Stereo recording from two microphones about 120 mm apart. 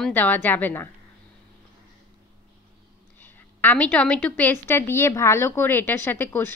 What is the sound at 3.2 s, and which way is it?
Speech, 15° left (ahead or behind).